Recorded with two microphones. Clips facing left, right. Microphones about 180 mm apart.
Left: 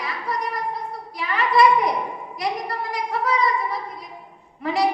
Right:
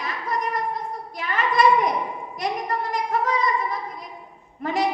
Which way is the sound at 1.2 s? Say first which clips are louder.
Left 2 dB; 45° right (ahead or behind).